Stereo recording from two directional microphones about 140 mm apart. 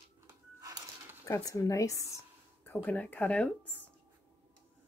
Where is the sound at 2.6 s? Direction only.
10° left (ahead or behind).